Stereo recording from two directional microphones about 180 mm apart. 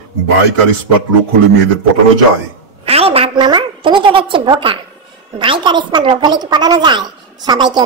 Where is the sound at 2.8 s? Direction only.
35° right (ahead or behind).